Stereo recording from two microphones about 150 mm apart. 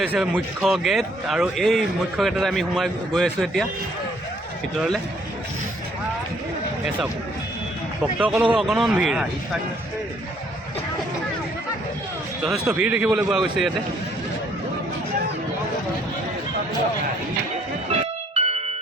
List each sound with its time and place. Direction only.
0.0 s speech: 10° right (ahead or behind)
8.2 s speech: 10° right (ahead or behind)
12.4 s speech: 5° right (ahead or behind)
18.3 s music: 45° right (ahead or behind)